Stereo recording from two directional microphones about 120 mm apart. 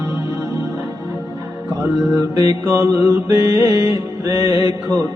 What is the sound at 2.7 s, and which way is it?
Music, 25° right (ahead or behind).